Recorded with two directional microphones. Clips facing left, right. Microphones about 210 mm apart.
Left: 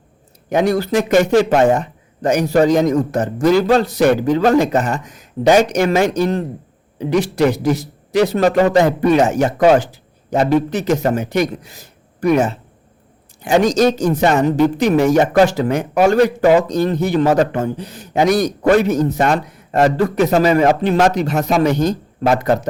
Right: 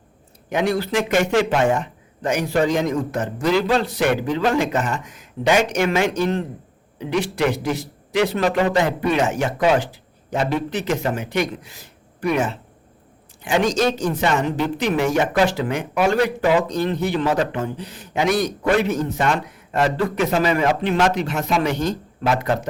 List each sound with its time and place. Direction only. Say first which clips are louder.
0.5 s speech: left 5 dB; 40° left (ahead or behind)